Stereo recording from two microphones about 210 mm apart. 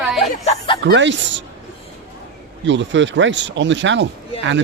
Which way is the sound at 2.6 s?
60° right (ahead or behind).